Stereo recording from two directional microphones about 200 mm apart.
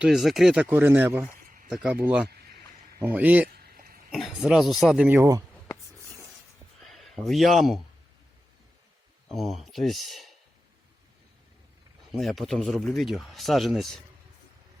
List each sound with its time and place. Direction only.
0.0 s speech: centre (ahead or behind)
3.5 s a sound: 45° right (ahead or behind)
4.1 s speech: centre (ahead or behind)
6.8 s speech: centre (ahead or behind)
9.3 s speech: centre (ahead or behind)
12.1 s speech: centre (ahead or behind)